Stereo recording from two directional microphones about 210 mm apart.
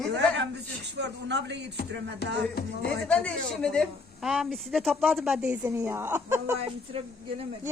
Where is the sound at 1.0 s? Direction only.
55° right (ahead or behind).